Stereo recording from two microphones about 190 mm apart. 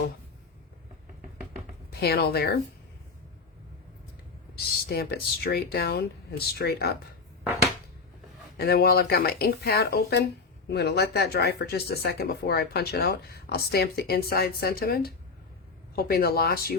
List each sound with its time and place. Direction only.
1.9 s speech: 55° left (ahead or behind)
4.5 s speech: 55° left (ahead or behind)
8.5 s speech: 55° left (ahead or behind)